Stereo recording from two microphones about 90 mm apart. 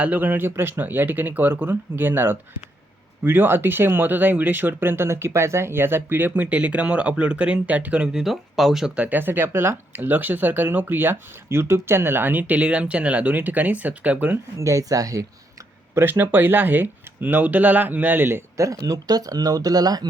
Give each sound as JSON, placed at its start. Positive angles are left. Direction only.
{"t": 0.0, "sound": "speech", "side_deg": -20}
{"t": 9.0, "sound": "speech", "side_deg": -20}
{"t": 14.6, "sound": "speech", "side_deg": -35}
{"t": 16.0, "sound": "speech", "side_deg": -25}